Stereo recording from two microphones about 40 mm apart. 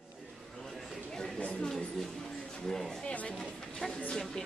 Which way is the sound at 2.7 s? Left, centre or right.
Centre.